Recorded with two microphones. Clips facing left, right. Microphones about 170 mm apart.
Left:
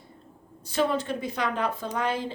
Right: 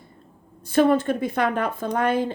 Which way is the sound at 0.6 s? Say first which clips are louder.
Right 8 dB; 55° right (ahead or behind).